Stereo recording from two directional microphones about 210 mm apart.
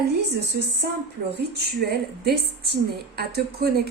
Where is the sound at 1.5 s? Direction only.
50° right (ahead or behind).